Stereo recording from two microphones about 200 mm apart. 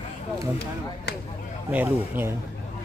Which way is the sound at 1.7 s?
10° right (ahead or behind).